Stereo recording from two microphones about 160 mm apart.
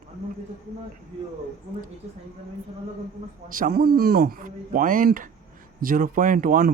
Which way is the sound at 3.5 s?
60° right (ahead or behind).